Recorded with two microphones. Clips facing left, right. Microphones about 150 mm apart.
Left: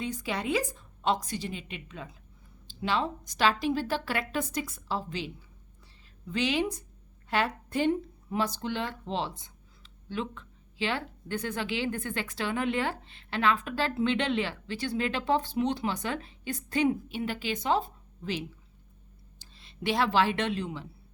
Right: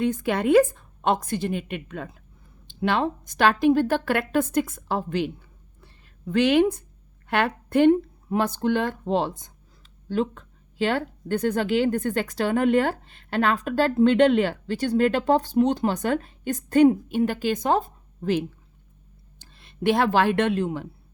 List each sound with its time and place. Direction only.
0.0 s a woman's voice: 55° right (ahead or behind)
5.8 s a sound: 55° right (ahead or behind)
7.3 s speech: 60° right (ahead or behind)